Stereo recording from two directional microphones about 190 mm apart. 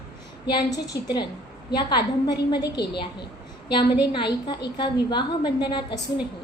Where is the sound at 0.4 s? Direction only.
20° left (ahead or behind).